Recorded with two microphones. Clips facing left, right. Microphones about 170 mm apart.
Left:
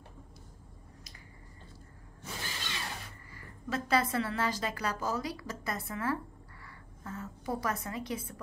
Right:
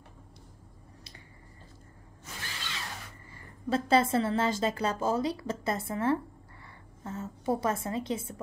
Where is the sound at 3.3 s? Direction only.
30° right (ahead or behind).